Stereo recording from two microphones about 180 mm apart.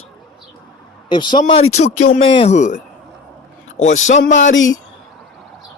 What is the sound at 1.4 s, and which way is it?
Speech, 35° left (ahead or behind).